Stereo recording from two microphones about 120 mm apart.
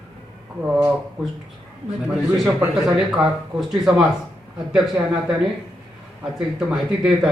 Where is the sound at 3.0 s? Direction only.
5° right (ahead or behind).